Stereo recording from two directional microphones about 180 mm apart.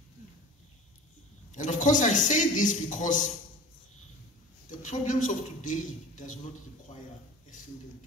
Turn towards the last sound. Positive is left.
turn(degrees=45)  # may be behind; listen again after turning